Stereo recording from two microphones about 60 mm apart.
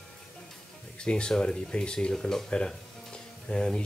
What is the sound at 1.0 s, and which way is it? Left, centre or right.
Speech, centre.